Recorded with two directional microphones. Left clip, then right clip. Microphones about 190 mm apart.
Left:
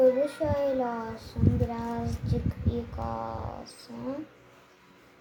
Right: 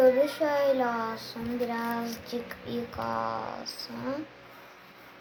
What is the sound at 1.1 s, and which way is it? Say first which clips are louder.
Child singing: left 2 dB; 5° left (ahead or behind).